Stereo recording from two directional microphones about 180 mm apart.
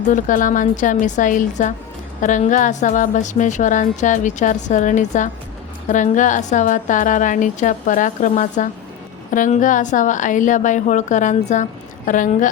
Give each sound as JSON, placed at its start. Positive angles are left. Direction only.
{"t": 0.1, "sound": "a woman's voice", "side_deg": 45}